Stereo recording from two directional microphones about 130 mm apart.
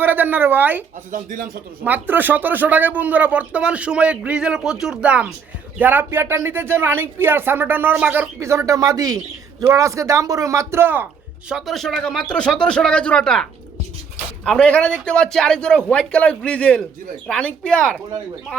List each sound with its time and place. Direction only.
0.0 s speech: 15° right (ahead or behind)
1.1 s speech: 90° right
1.8 s a man's voice: 15° right (ahead or behind); by 18.0 s 5° left (ahead or behind)